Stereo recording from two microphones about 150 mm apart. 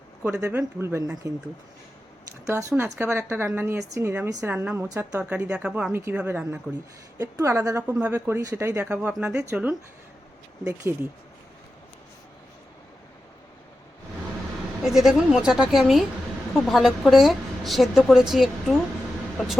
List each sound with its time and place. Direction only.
0.4 s speech: 15° right (ahead or behind)
2.5 s speech: 20° right (ahead or behind)
14.8 s a woman's voice: 5° right (ahead or behind)